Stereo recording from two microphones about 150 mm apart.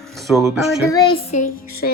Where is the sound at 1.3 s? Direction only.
75° left (ahead or behind).